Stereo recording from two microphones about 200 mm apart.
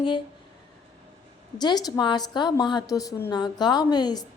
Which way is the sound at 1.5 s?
20° left (ahead or behind).